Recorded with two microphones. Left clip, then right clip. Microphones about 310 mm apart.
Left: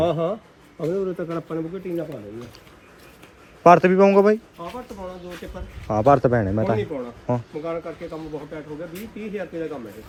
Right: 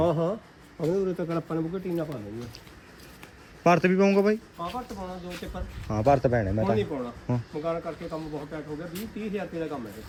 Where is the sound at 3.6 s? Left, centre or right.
Centre.